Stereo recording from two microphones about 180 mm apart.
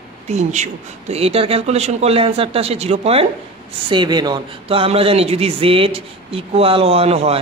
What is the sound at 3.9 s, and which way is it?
Speech, 25° right (ahead or behind).